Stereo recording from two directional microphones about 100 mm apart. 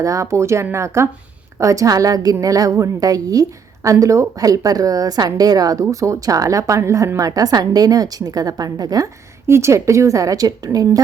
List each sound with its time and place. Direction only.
0.0 s a woman's voice: 35° right (ahead or behind)
9.5 s a woman's voice: 30° right (ahead or behind)